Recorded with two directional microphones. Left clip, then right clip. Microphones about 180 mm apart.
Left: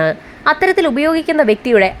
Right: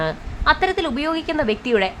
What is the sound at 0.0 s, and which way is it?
A woman's voice, 30° left (ahead or behind).